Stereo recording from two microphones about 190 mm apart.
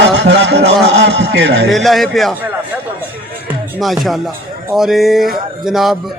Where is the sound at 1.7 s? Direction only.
Centre (ahead or behind).